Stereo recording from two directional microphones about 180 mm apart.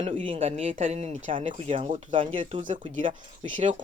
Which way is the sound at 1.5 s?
30° right (ahead or behind).